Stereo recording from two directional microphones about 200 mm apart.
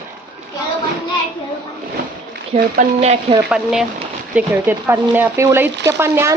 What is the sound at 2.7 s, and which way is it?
Speech, 35° right (ahead or behind).